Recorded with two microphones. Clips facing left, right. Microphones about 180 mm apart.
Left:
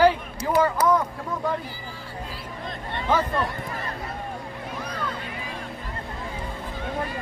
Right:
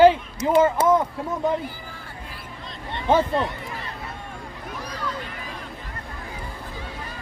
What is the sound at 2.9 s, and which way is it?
Speech, 25° right (ahead or behind).